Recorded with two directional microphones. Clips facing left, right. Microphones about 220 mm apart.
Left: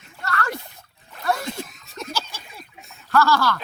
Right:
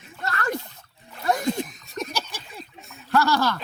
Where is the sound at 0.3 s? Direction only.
20° right (ahead or behind).